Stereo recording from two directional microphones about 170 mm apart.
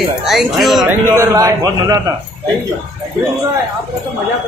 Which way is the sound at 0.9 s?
20° right (ahead or behind).